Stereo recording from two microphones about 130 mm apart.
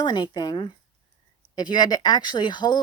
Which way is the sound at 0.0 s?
35° left (ahead or behind).